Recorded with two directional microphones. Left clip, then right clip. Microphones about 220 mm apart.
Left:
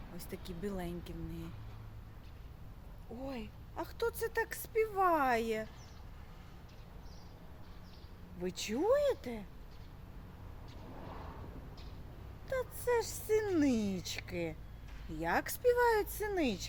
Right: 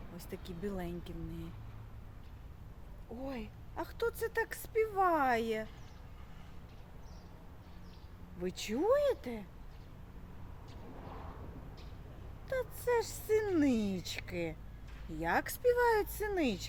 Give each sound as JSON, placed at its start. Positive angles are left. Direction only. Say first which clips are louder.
{"t": 0.2, "sound": "speech", "louder": "even", "side_deg": -5}
{"t": 3.2, "sound": "speech", "louder": "right 1 dB", "side_deg": -10}
{"t": 8.4, "sound": "speech", "louder": "even", "side_deg": -10}
{"t": 12.5, "sound": "speech", "louder": "even", "side_deg": -10}